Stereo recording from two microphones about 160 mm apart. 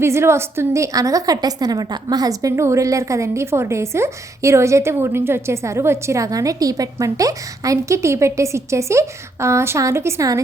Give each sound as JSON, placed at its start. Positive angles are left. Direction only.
{"t": 0.0, "sound": "a woman's voice", "side_deg": -15}